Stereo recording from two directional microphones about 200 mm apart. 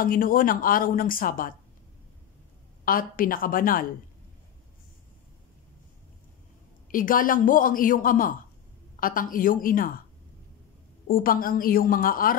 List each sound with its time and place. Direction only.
0.0 s a man's voice: 45° left (ahead or behind)
2.8 s a man's voice: 45° left (ahead or behind)
6.9 s a man's voice: 45° left (ahead or behind)
11.1 s a man's voice: 45° left (ahead or behind)